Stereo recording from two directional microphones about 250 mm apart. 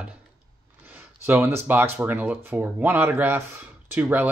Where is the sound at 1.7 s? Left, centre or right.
Centre.